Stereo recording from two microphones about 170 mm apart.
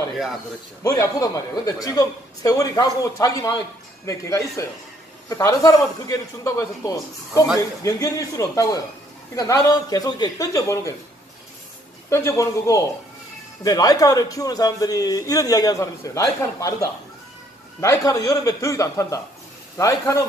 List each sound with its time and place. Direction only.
0.8 s a man's voice: 20° left (ahead or behind)
12.1 s a man's voice: 20° left (ahead or behind)